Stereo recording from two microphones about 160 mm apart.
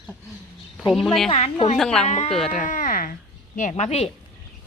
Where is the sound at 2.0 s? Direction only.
40° left (ahead or behind).